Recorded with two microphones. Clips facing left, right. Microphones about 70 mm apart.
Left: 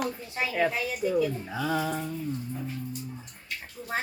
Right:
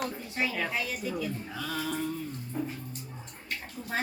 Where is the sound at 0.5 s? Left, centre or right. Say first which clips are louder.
Left 5 dB; centre.